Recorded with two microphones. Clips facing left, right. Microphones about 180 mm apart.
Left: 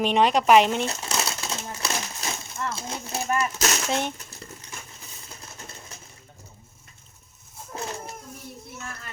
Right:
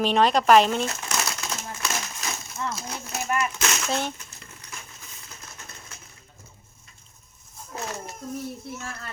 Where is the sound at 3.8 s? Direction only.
20° left (ahead or behind).